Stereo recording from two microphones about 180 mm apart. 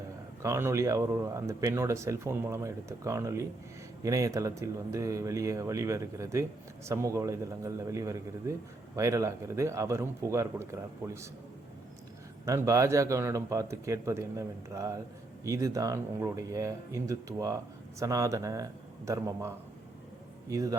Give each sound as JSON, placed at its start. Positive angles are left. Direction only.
{"t": 0.4, "sound": "speech", "side_deg": -15}
{"t": 12.5, "sound": "a man's voice", "side_deg": -15}